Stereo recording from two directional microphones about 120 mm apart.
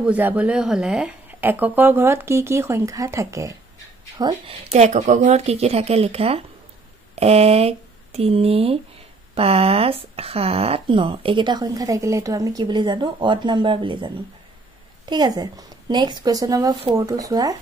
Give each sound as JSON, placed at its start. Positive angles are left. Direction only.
{"t": 0.0, "sound": "speech", "side_deg": -15}
{"t": 4.5, "sound": "a woman's voice", "side_deg": -65}